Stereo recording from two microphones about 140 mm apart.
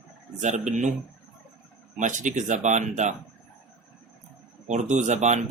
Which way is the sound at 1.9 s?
60° right (ahead or behind).